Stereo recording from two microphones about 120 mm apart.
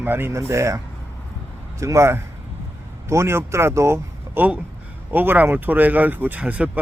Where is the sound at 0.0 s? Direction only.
20° right (ahead or behind).